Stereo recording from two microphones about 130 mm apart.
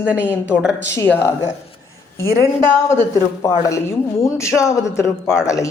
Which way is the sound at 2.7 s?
20° left (ahead or behind).